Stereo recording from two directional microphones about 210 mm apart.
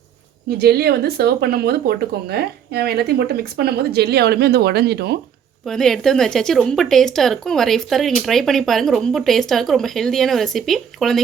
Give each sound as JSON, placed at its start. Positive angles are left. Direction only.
{"t": 0.6, "sound": "speech", "side_deg": -50}
{"t": 5.6, "sound": "speech", "side_deg": 0}